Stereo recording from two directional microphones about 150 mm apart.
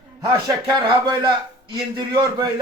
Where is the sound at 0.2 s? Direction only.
30° right (ahead or behind).